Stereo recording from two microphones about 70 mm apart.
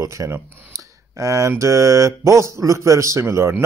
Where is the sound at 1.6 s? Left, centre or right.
Right.